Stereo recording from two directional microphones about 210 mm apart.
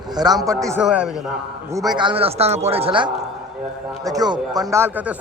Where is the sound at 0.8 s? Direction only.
5° right (ahead or behind).